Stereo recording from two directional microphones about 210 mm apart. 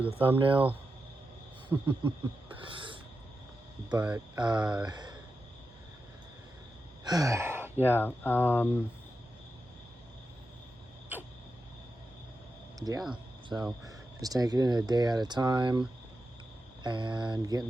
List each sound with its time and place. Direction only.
0.0 s speech: 10° right (ahead or behind)
0.3 s speech: 25° right (ahead or behind)
1.7 s speech: 20° right (ahead or behind)
2.6 s a sound: 25° right (ahead or behind)
4.4 s speech: 20° right (ahead or behind)
4.6 s speech: 5° right (ahead or behind)
4.9 s speech: 20° right (ahead or behind)
7.0 s speech: 20° right (ahead or behind)
7.9 s speech: 10° left (ahead or behind)
12.8 s speech: 15° right (ahead or behind)
16.8 s speech: 20° right (ahead or behind)